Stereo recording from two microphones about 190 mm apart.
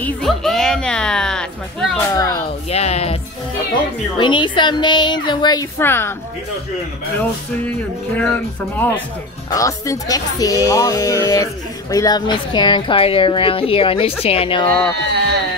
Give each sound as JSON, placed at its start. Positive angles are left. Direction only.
{"t": 0.0, "sound": "music", "side_deg": 0}
{"t": 2.0, "sound": "speech", "side_deg": 20}
{"t": 4.2, "sound": "speech", "side_deg": 25}
{"t": 8.2, "sound": "speech", "side_deg": 10}
{"t": 14.7, "sound": "speech", "side_deg": 5}